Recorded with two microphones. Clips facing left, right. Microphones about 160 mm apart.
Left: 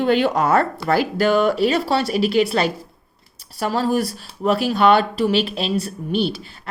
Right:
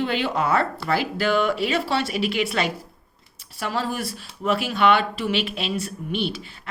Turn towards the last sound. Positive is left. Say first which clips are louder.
# left 5 dB
turn(degrees=35)  # may be behind; listen again after turning